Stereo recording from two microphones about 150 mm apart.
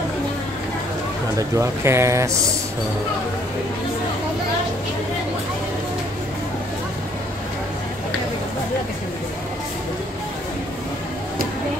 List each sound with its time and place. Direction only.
1.6 s speech: 20° right (ahead or behind)